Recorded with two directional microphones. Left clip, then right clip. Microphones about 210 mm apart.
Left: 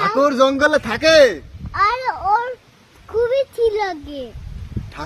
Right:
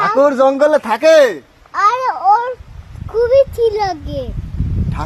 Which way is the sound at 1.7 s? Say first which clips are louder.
Right 4 dB; 5° left (ahead or behind).